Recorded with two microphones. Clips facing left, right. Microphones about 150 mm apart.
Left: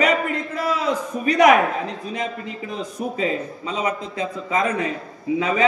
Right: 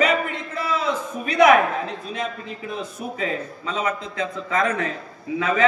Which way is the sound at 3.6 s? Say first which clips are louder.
Right 1 dB; 15° left (ahead or behind).